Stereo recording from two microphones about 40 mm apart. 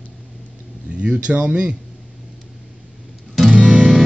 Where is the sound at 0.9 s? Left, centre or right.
Right.